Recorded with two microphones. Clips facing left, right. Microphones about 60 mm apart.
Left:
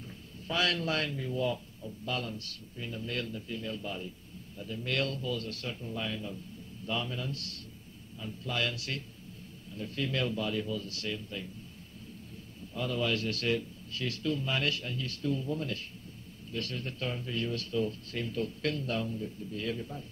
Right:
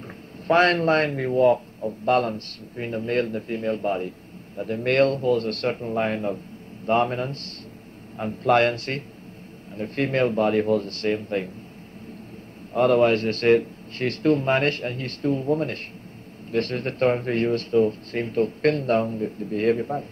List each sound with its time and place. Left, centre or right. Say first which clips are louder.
0.5 s speech: right 13 dB; right
12.7 s speech: right 14 dB; right